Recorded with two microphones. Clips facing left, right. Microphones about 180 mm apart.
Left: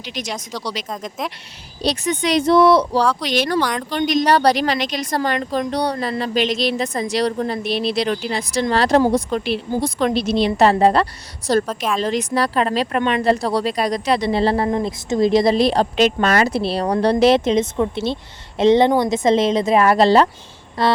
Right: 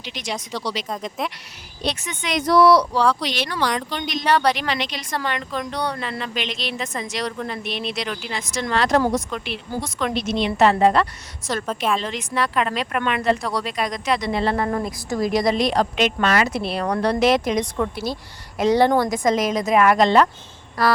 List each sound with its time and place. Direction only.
0.0 s speech: 40° left (ahead or behind)
0.9 s speech: centre (ahead or behind)
1.8 s speech: 35° left (ahead or behind)
3.0 s speech: centre (ahead or behind)
3.2 s speech: 45° left (ahead or behind)
3.6 s speech: centre (ahead or behind)
3.9 s speech: 45° left (ahead or behind)
11.6 s speech: centre (ahead or behind)
11.9 s speech: 35° left (ahead or behind)
18.9 s a woman's voice: 10° left (ahead or behind)
19.1 s a woman's voice: 25° left (ahead or behind)